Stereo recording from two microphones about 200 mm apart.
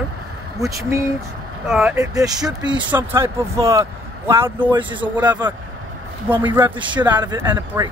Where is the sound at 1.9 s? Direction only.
15° right (ahead or behind).